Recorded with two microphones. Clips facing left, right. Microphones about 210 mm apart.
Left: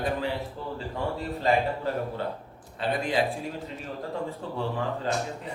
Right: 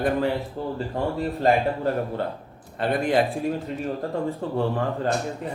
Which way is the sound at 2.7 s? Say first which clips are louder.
Right 5 dB; 55° right (ahead or behind).